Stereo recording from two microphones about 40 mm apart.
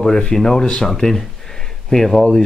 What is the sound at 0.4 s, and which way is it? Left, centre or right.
Speech, centre.